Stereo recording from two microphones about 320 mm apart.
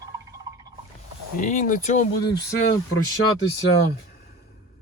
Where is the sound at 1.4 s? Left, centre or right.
Left.